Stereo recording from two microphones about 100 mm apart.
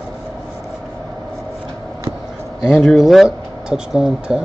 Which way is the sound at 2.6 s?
5° right (ahead or behind).